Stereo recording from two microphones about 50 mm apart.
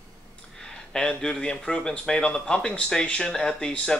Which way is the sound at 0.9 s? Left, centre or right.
Centre.